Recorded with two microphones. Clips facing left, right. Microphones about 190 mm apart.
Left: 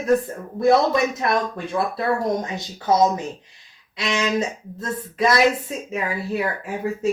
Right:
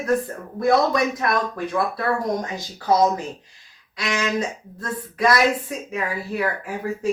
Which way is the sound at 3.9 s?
20° left (ahead or behind).